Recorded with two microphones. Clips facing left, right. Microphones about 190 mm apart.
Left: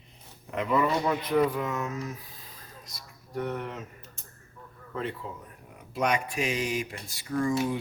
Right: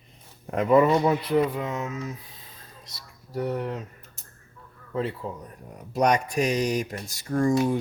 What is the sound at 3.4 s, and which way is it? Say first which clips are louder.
Speech: right 4 dB; 35° right (ahead or behind).